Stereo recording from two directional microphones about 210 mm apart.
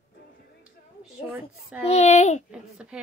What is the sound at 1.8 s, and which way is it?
Speech, 30° left (ahead or behind).